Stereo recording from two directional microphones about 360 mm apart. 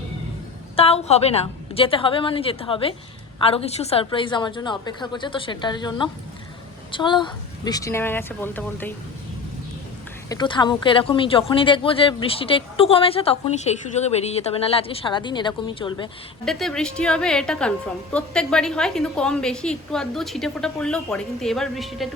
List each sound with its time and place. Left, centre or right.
0.8 s speech: centre
10.2 s speech: centre
16.5 s a woman's voice: centre